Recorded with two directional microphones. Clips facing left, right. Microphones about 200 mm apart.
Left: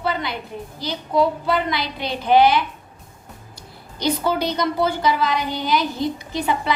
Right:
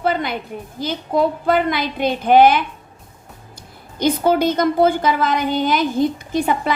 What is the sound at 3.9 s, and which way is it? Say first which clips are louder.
A woman's voice: right 5 dB; 50° right (ahead or behind).